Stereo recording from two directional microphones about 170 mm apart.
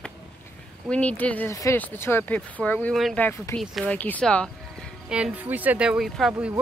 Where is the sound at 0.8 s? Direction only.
5° left (ahead or behind).